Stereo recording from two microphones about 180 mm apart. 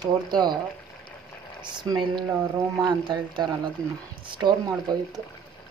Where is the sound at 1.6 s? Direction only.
25° right (ahead or behind).